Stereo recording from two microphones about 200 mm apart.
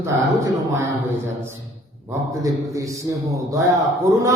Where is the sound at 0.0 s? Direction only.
15° right (ahead or behind).